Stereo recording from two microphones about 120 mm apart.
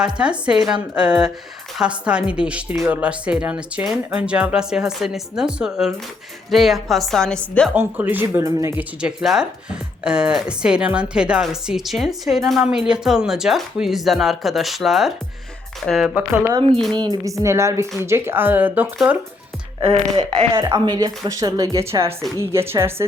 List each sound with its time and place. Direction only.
0.2 s speech: 10° right (ahead or behind); by 7.7 s 5° left (ahead or behind)
7.7 s a woman's voice: 15° right (ahead or behind)
8.7 s speech: 10° right (ahead or behind)
16.7 s speech: 5° left (ahead or behind)
17.2 s a woman's voice: 25° right (ahead or behind)
19.8 s speech: 45° right (ahead or behind)
20.8 s a woman's voice: 35° right (ahead or behind)